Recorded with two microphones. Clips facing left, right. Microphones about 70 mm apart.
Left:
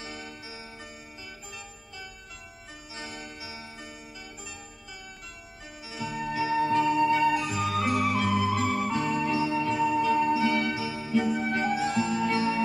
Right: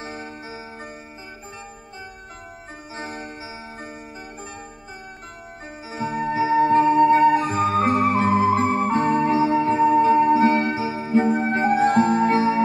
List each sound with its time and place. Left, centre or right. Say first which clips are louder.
0.0 s music: right 7 dB; right
3.0 s music: right 7 dB; right
5.9 s music: right 8 dB; right